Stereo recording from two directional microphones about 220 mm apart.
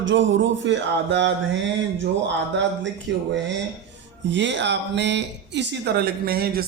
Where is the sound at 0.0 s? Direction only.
55° right (ahead or behind).